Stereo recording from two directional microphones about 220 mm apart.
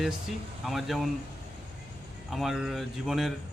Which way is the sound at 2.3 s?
Centre (ahead or behind).